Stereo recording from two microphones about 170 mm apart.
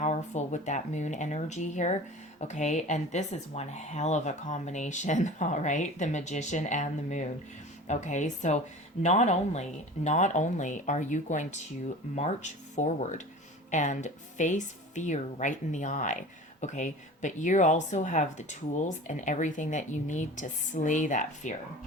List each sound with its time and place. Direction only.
0.0 s speech: 40° left (ahead or behind)